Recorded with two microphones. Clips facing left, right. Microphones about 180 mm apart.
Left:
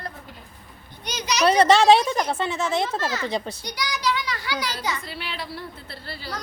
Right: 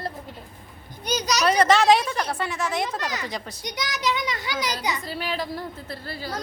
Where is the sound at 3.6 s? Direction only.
20° right (ahead or behind).